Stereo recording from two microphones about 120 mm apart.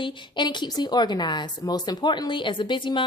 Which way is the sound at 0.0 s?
40° left (ahead or behind).